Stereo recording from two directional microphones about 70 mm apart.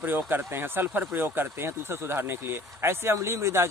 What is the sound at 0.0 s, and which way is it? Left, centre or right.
Speech, right.